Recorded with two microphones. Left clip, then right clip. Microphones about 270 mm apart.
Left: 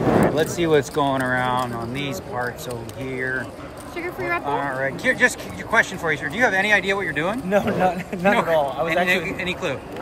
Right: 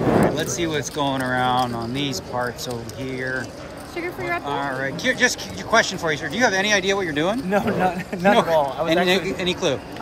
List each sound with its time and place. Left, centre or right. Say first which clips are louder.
0.0 s speech: left 1 dB; centre